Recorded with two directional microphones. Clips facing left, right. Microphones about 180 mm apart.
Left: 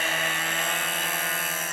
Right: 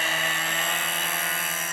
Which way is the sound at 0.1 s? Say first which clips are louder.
Even; 10° left (ahead or behind).